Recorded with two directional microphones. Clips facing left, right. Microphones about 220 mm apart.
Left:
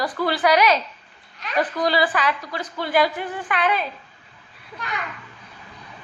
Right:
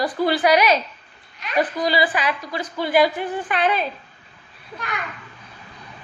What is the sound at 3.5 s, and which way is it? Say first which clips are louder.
Speech: right 1 dB; 25° right (ahead or behind).